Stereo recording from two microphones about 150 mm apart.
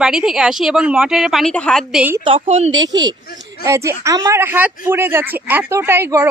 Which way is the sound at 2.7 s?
30° right (ahead or behind).